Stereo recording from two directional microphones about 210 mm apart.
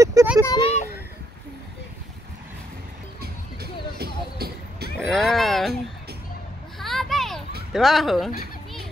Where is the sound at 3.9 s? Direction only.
50° right (ahead or behind).